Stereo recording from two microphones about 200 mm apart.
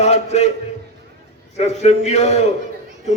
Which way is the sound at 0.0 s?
35° left (ahead or behind).